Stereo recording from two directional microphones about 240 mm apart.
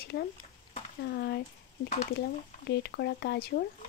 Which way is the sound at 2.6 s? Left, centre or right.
Left.